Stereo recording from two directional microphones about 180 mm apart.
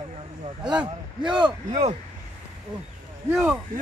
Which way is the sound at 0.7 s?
25° right (ahead or behind).